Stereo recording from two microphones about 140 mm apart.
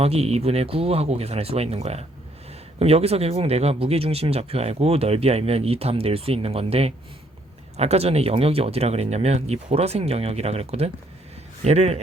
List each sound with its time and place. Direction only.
0.0 s speech: 45° right (ahead or behind)